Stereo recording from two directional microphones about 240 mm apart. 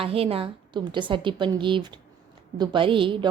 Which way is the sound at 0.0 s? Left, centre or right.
Right.